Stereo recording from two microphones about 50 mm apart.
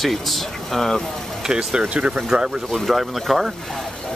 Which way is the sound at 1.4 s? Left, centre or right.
Centre.